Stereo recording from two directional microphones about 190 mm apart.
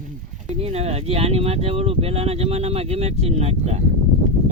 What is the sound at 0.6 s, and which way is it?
Speech, 35° right (ahead or behind).